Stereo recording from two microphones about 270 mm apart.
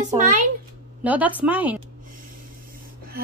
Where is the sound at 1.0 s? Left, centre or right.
Centre.